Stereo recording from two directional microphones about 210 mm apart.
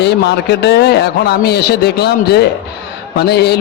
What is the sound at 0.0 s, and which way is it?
A man's voice, 55° left (ahead or behind).